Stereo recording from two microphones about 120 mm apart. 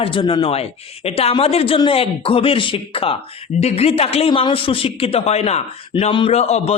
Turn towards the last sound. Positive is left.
turn(degrees=65)  # may be behind; listen again after turning